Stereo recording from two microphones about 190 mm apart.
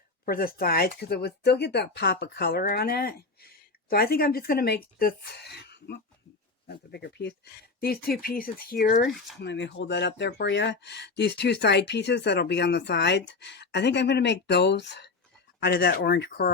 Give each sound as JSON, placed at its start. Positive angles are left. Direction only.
{"t": 0.3, "sound": "speech", "side_deg": 50}
{"t": 9.4, "sound": "speech", "side_deg": 70}